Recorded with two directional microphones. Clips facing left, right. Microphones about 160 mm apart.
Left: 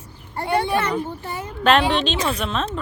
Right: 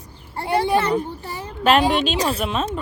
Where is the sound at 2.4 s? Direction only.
10° right (ahead or behind).